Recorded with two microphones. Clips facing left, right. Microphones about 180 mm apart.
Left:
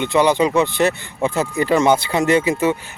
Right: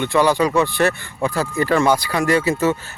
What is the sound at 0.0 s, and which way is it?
Speech, 20° left (ahead or behind).